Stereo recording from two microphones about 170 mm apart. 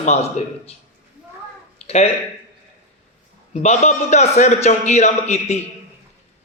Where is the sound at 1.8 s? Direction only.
40° left (ahead or behind).